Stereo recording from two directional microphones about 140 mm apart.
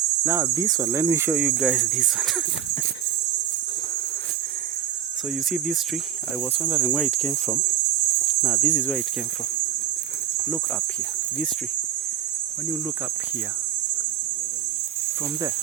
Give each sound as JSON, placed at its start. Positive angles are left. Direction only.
{"t": 0.3, "sound": "cricket", "side_deg": -25}
{"t": 6.6, "sound": "speech", "side_deg": -5}